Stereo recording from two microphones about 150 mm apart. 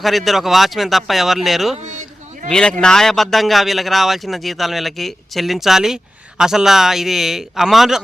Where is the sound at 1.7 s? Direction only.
50° right (ahead or behind).